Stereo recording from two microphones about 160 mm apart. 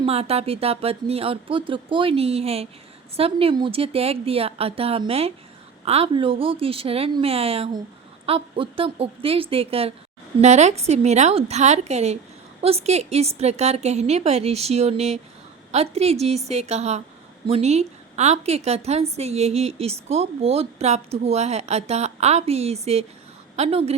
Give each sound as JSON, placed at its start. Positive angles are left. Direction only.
{"t": 0.0, "sound": "a woman's voice", "side_deg": -40}